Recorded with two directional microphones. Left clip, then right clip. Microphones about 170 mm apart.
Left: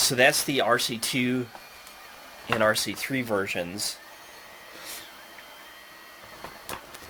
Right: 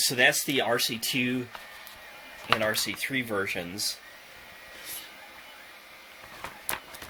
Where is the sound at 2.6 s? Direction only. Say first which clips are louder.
Left 4 dB; 35° left (ahead or behind).